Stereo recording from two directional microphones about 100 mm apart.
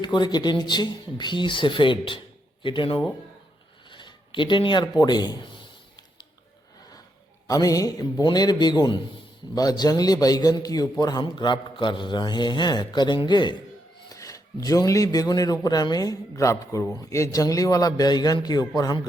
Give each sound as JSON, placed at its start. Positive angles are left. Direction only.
{"t": 0.0, "sound": "a man's voice", "side_deg": 50}
{"t": 7.4, "sound": "a man's voice", "side_deg": 35}
{"t": 14.1, "sound": "a man's voice", "side_deg": 35}